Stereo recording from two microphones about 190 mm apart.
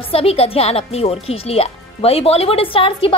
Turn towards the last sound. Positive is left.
turn(degrees=30)  # may be behind; listen again after turning